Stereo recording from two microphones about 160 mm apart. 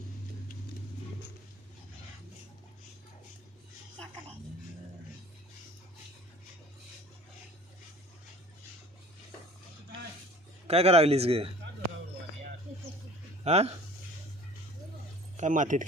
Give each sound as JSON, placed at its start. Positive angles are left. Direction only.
{"t": 10.7, "sound": "speech", "side_deg": -40}
{"t": 13.4, "sound": "speech", "side_deg": -40}
{"t": 15.4, "sound": "speech", "side_deg": -50}